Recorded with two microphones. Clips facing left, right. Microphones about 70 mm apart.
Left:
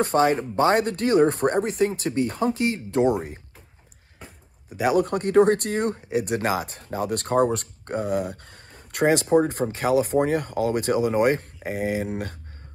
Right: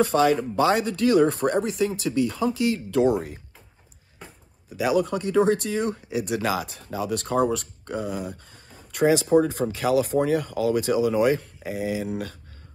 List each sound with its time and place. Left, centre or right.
0.0 s speech: left
4.6 s speech: left